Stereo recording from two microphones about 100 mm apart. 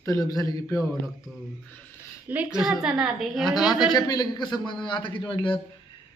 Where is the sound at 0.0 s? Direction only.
35° left (ahead or behind).